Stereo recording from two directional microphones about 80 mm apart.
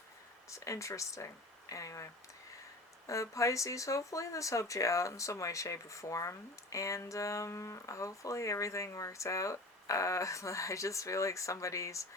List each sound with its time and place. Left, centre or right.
0.5 s speech: left
3.1 s speech: left